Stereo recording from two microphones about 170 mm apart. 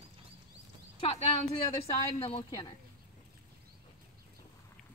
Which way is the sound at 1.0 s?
35° left (ahead or behind).